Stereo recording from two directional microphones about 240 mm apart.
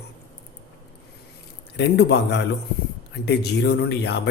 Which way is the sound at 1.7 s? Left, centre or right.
Left.